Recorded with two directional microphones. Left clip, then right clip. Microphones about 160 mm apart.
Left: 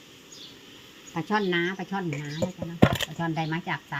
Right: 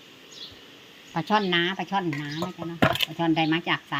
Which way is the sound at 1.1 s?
20° right (ahead or behind).